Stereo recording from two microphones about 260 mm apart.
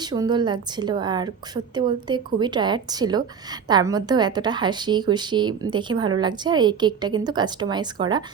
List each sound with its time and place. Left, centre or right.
0.0 s a woman's voice: centre